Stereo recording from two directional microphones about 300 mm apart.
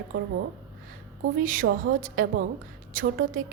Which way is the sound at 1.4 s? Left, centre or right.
Right.